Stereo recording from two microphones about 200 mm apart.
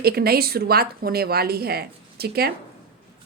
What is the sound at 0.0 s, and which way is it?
A woman's voice, 50° right (ahead or behind).